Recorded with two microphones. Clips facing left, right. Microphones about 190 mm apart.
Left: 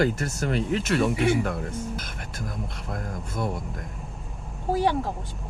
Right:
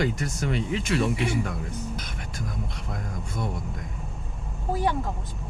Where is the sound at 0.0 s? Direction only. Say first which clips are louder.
Left 3 dB; 45° left (ahead or behind).